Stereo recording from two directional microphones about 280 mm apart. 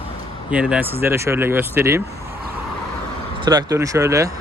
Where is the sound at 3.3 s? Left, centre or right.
Centre.